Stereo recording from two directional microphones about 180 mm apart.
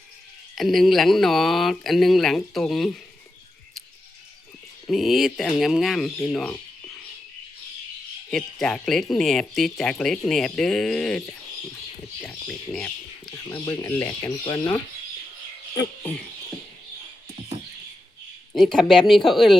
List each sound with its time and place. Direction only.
0.5 s speech: centre (ahead or behind)
4.9 s speech: centre (ahead or behind)
8.3 s speech: centre (ahead or behind)
13.3 s speech: 15° left (ahead or behind)
18.5 s speech: centre (ahead or behind)